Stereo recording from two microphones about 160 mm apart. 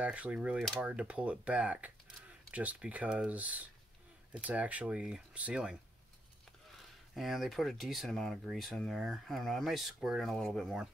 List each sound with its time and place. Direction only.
0.0 s speech: 10° right (ahead or behind)
7.2 s speech: centre (ahead or behind)